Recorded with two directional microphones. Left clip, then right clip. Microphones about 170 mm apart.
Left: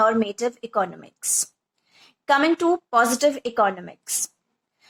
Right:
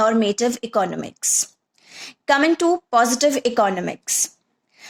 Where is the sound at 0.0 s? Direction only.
40° right (ahead or behind).